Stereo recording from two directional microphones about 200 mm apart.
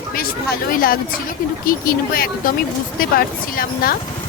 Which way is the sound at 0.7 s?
45° left (ahead or behind).